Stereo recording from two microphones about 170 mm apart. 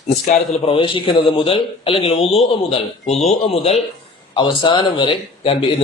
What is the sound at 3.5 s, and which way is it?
A man's voice, 35° left (ahead or behind).